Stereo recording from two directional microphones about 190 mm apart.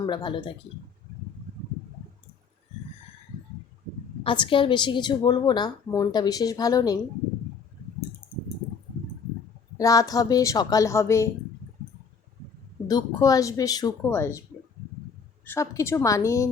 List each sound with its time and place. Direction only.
0.0 s a woman's voice: 25° left (ahead or behind)
4.2 s a woman's voice: 25° left (ahead or behind)
9.7 s speech: 15° left (ahead or behind)
12.9 s a woman's voice: 20° left (ahead or behind)
15.4 s speech: 15° left (ahead or behind)